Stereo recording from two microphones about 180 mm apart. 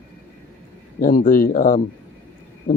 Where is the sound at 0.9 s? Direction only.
50° left (ahead or behind).